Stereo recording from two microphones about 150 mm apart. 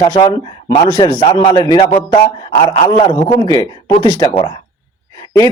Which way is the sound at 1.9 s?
45° left (ahead or behind).